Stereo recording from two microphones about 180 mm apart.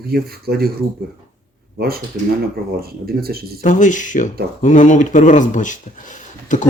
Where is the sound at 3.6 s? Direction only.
45° left (ahead or behind).